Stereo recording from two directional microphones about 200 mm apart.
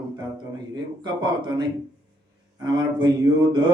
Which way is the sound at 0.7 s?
20° right (ahead or behind).